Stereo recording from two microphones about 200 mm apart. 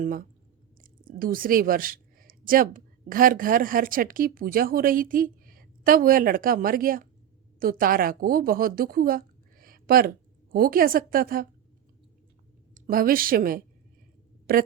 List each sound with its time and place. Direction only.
0.0 s a woman's voice: 45° right (ahead or behind)
12.7 s a woman's voice: 45° right (ahead or behind)